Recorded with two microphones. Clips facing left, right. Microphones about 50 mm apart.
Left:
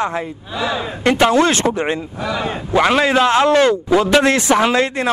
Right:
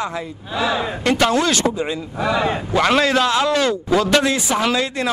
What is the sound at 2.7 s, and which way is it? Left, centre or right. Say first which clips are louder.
Speech: left 4 dB; centre.